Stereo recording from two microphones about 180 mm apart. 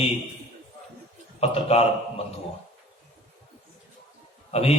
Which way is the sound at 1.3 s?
35° left (ahead or behind).